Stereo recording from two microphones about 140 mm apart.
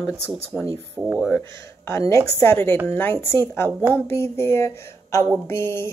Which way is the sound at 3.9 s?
15° left (ahead or behind).